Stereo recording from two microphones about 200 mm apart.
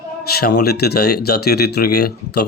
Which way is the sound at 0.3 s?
50° left (ahead or behind).